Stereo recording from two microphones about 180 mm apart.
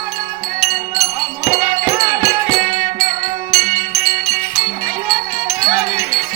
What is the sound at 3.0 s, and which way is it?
Music, centre (ahead or behind).